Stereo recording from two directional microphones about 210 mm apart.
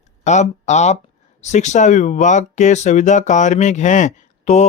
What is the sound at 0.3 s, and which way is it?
Speech, 35° left (ahead or behind).